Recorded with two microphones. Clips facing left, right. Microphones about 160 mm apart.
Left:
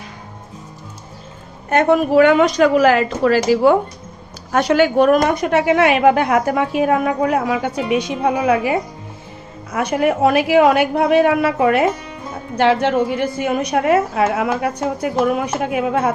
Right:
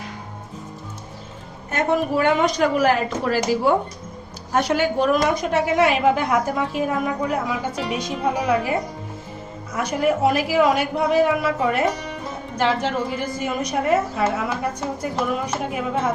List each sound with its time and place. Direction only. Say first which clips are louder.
1.7 s a woman's voice: left 7 dB; 80° left